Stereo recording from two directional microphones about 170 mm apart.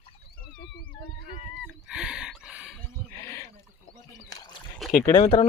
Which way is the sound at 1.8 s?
5° right (ahead or behind).